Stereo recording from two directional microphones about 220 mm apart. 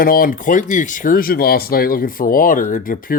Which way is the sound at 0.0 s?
40° left (ahead or behind).